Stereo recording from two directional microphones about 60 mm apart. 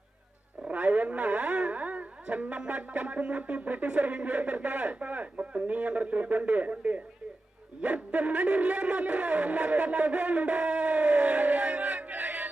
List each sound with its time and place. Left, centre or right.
0.7 s speech: right